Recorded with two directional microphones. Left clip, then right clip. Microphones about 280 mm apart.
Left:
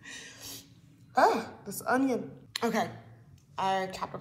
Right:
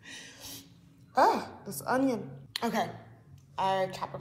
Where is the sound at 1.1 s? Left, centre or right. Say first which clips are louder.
Even; centre.